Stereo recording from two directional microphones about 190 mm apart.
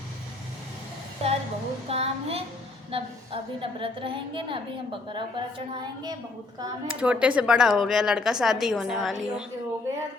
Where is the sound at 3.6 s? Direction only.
30° right (ahead or behind).